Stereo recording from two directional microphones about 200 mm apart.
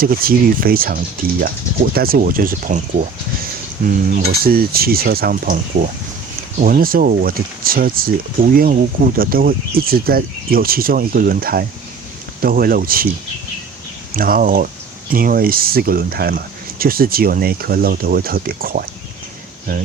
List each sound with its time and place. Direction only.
0.0 s speech: 45° right (ahead or behind)
4.1 s speech: 50° right (ahead or behind)
14.1 s speech: 45° right (ahead or behind)